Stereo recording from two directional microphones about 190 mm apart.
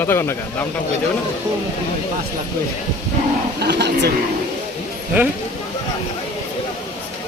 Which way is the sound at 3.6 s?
65° right (ahead or behind).